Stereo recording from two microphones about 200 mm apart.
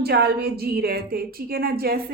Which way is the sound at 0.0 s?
50° right (ahead or behind).